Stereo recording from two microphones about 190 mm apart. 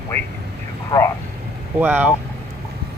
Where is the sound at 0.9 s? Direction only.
15° left (ahead or behind).